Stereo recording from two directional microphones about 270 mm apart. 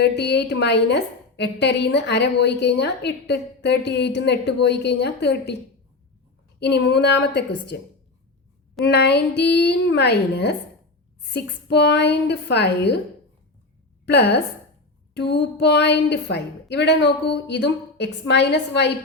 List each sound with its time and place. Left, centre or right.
0.0 s a woman's voice: left
6.6 s a woman's voice: left
8.8 s a woman's voice: left
14.0 s a woman's voice: left